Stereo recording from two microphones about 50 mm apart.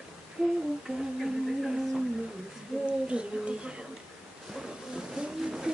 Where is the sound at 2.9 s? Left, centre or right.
Right.